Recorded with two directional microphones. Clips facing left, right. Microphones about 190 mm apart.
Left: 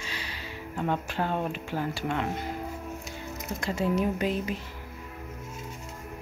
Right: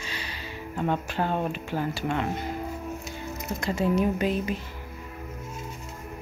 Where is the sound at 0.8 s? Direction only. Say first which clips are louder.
Right 2 dB; 10° right (ahead or behind).